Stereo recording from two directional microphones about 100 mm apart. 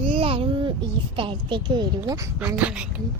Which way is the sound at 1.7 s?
45° right (ahead or behind).